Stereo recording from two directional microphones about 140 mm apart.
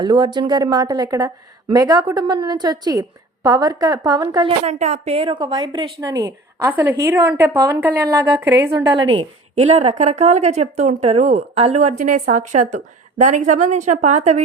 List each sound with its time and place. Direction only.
0.0 s a woman's voice: 30° right (ahead or behind)
4.4 s a woman's voice: 55° right (ahead or behind); by 9.6 s 35° right (ahead or behind)
9.6 s speech: 50° right (ahead or behind)